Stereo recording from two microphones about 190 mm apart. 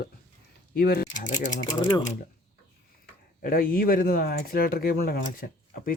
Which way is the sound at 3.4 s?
50° left (ahead or behind).